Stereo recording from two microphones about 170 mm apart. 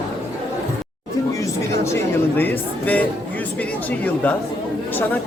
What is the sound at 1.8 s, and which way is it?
A woman's voice, 15° left (ahead or behind).